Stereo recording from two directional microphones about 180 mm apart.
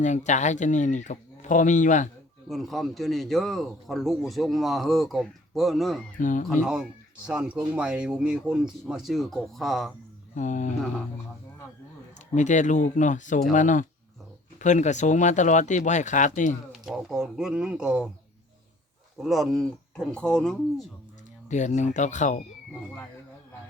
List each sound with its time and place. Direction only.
0.0 s speech: 40° left (ahead or behind)
2.5 s speech: centre (ahead or behind)
6.1 s speech: 45° left (ahead or behind)
7.3 s speech: 5° right (ahead or behind)
10.3 s speech: 45° left (ahead or behind)
12.3 s speech: 40° left (ahead or behind)
16.7 s speech: centre (ahead or behind)
19.1 s speech: centre (ahead or behind)
21.5 s speech: 40° left (ahead or behind)